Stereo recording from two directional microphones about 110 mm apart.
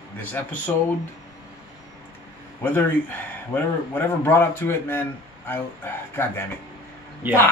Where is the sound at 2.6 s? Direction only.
15° left (ahead or behind).